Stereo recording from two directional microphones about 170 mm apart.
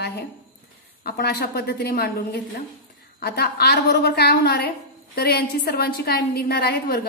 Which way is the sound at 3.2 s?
70° left (ahead or behind).